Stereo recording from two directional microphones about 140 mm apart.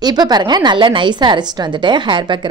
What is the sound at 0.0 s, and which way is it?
A woman's voice, 30° right (ahead or behind).